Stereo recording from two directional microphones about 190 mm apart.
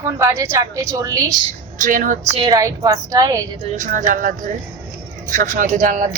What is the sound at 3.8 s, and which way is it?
A woman's voice, 45° right (ahead or behind).